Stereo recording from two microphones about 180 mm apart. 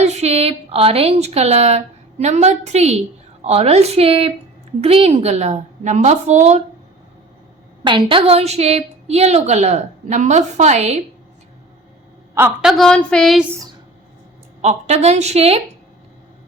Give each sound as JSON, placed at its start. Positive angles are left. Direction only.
{"t": 0.0, "sound": "a woman's voice", "side_deg": -35}
{"t": 7.9, "sound": "a woman's voice", "side_deg": -30}
{"t": 12.3, "sound": "a woman's voice", "side_deg": -15}
{"t": 12.6, "sound": "a woman's voice", "side_deg": 0}
{"t": 14.6, "sound": "a woman's voice", "side_deg": -40}